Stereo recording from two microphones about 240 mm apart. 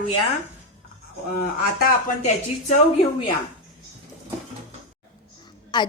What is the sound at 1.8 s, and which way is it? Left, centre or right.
Speech, left.